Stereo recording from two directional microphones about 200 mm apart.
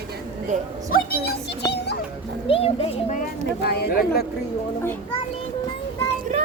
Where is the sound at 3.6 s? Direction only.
55° left (ahead or behind).